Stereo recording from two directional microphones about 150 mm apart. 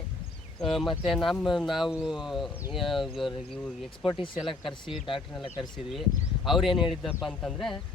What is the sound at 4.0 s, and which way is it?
Speech, 30° left (ahead or behind).